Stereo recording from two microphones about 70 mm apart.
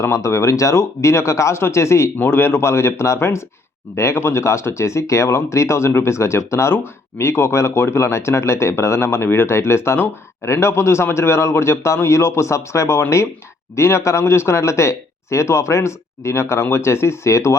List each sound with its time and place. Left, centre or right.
0.0 s speech: left